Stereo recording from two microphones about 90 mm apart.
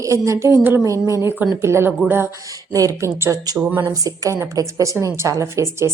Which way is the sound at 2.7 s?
40° right (ahead or behind).